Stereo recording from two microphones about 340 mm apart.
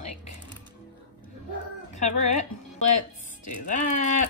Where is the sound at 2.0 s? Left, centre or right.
Left.